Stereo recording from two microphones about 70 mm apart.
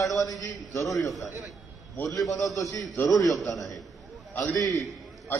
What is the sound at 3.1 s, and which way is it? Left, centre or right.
Speech, centre.